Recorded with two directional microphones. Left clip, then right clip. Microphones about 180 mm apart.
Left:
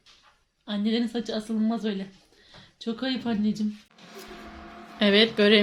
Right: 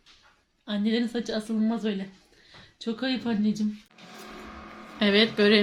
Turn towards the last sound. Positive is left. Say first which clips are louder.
# left 2 dB
turn(degrees=15)  # may be behind; listen again after turning